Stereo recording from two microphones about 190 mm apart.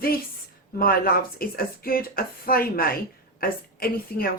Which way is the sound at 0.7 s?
50° left (ahead or behind).